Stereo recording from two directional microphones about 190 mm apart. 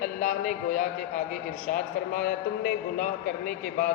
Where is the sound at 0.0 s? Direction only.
45° left (ahead or behind).